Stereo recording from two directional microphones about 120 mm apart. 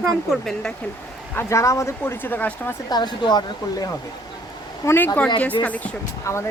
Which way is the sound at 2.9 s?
35° left (ahead or behind).